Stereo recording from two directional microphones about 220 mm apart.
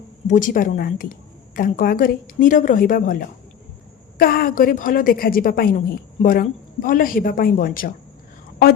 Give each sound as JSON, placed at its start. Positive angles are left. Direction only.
{"t": 0.3, "sound": "a woman's voice", "side_deg": 35}